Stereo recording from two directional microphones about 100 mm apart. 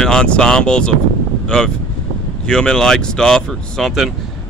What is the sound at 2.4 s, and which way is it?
Speech, 10° left (ahead or behind).